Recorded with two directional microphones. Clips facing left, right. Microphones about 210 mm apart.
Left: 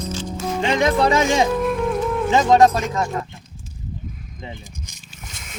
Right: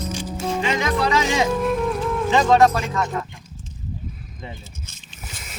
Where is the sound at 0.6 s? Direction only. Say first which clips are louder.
Left 6 dB; 25° left (ahead or behind).